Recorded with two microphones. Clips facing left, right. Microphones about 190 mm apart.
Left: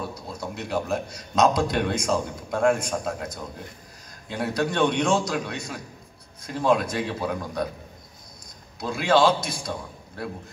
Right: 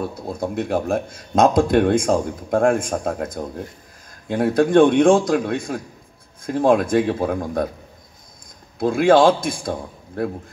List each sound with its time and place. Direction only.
0.0 s speech: 55° right (ahead or behind)
8.7 s speech: 50° right (ahead or behind)